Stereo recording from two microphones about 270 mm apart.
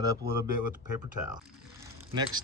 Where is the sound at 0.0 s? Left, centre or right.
Centre.